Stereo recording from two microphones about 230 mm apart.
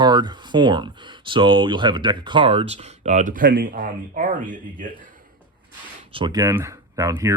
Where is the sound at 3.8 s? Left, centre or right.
Right.